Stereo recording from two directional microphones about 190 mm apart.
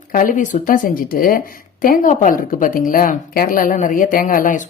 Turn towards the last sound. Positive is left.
turn(degrees=45)  # may be behind; listen again after turning